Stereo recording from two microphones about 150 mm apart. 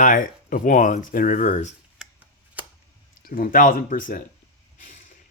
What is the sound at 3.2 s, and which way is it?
Speech, 70° left (ahead or behind).